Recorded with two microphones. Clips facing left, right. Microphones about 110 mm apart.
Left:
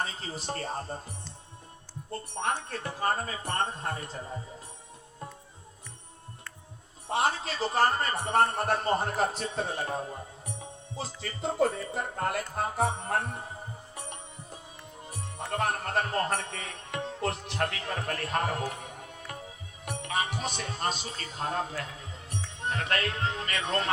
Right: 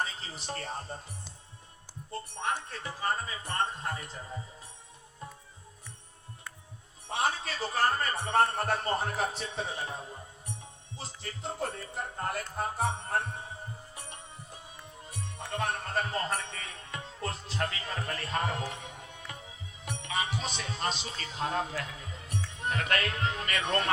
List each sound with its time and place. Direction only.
0.0 s a man's voice: 40° left (ahead or behind)
2.4 s speech: 50° left (ahead or behind)
3.8 s a man's voice: 35° left (ahead or behind)
7.2 s a man's voice: 30° left (ahead or behind)
11.3 s speech: 90° left
15.1 s music: 50° left (ahead or behind)
19.8 s speech: 50° left (ahead or behind)
22.3 s speech: 30° left (ahead or behind)